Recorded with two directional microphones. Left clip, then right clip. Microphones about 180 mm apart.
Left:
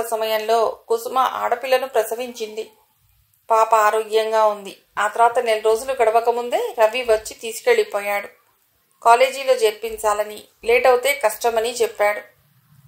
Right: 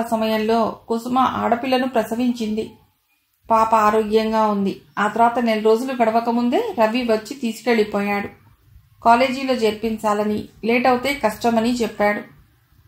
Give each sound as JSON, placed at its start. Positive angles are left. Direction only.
{"t": 0.0, "sound": "a woman's voice", "side_deg": 40}